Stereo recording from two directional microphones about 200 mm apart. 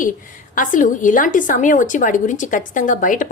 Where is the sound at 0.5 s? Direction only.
40° left (ahead or behind).